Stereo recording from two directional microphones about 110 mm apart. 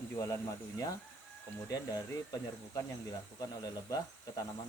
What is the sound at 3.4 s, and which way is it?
Speech, 35° left (ahead or behind).